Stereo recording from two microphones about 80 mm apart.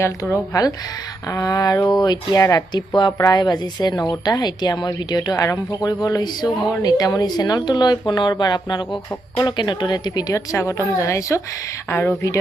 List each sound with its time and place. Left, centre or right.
0.0 s a woman's voice: left
2.7 s speech: left
4.9 s speech: left
10.6 s a woman's voice: left
11.9 s speech: left